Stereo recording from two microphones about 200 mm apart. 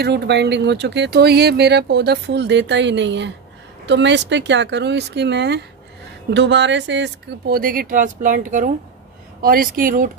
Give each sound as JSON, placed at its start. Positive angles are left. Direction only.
{"t": 0.0, "sound": "speech", "side_deg": -55}